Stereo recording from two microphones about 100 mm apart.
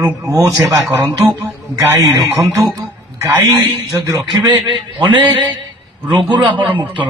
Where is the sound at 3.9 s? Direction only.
35° right (ahead or behind).